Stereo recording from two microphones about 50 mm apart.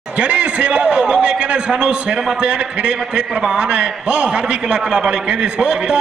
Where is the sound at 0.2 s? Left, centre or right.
Right.